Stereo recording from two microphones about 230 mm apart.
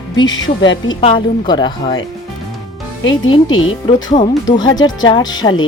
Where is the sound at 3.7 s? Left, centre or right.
Left.